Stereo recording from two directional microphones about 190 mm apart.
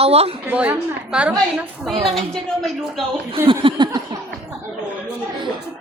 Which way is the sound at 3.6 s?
25° right (ahead or behind).